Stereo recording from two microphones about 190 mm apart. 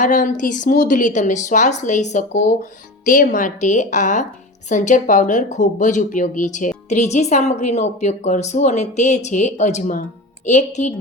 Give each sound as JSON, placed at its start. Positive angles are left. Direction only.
{"t": 0.0, "sound": "a woman's voice", "side_deg": 40}